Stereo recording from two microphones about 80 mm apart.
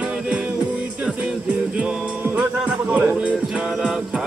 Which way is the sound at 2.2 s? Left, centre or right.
Centre.